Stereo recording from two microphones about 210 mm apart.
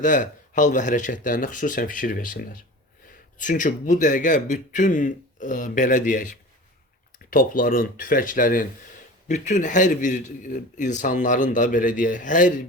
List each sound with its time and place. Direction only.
0.0 s a man's voice: 40° left (ahead or behind)